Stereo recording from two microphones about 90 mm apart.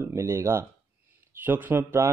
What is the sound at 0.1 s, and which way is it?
Speech, 30° right (ahead or behind).